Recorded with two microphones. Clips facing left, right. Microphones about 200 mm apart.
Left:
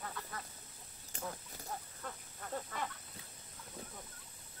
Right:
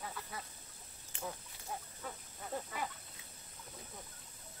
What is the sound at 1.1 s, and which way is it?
Chicken, 40° left (ahead or behind).